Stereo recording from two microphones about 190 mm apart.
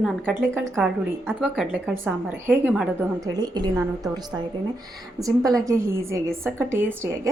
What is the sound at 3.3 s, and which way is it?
Speech, 20° right (ahead or behind).